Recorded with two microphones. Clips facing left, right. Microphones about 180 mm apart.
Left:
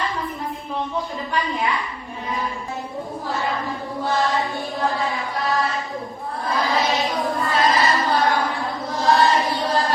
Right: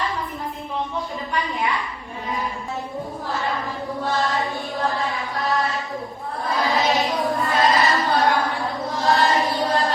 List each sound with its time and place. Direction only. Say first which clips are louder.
0.9 s a woman's voice: left 1 dB; centre (ahead or behind)
4.0 s choir: left 2 dB; centre (ahead or behind)
4.9 s chant: left 1 dB; centre (ahead or behind)
6.6 s child singing: right 1 dB; centre (ahead or behind)
7.3 s a sound: even; 20° right (ahead or behind)
7.6 s chant: even; centre (ahead or behind)